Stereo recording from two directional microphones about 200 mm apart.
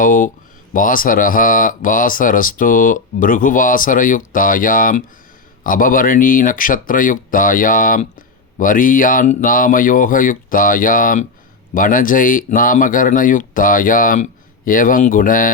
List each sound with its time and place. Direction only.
0.0 s speech: 40° left (ahead or behind)